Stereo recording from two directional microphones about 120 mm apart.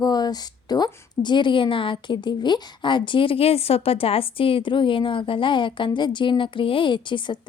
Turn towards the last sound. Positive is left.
turn(degrees=40)  # may be behind; listen again after turning